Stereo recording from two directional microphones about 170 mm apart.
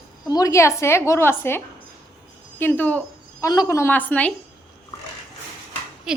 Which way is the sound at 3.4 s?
20° left (ahead or behind).